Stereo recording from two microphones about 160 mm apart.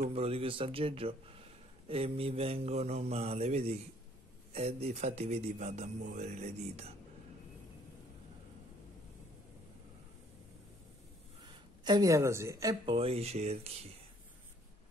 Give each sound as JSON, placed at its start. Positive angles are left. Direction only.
{"t": 0.1, "sound": "mantra", "side_deg": -40}
{"t": 4.5, "sound": "speech", "side_deg": -40}
{"t": 11.8, "sound": "a woman's voice", "side_deg": -25}
{"t": 12.8, "sound": "mantra", "side_deg": -35}